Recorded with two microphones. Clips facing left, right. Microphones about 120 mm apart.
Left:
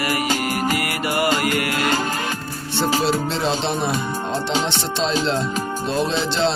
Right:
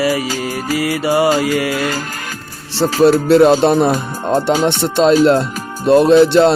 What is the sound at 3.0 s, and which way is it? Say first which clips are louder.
Music: right 12 dB; 60° right (ahead or behind).